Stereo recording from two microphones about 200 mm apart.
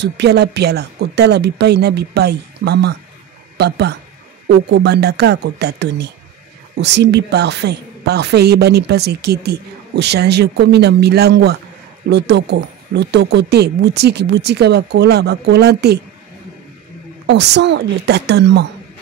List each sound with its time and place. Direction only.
0.0 s a woman's voice: 55° right (ahead or behind)
17.3 s a woman's voice: 60° right (ahead or behind)